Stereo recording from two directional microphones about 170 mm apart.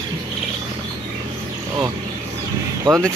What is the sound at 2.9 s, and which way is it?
Speech, 20° right (ahead or behind).